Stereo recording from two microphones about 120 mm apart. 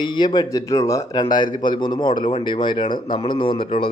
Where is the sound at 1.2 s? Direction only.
35° left (ahead or behind).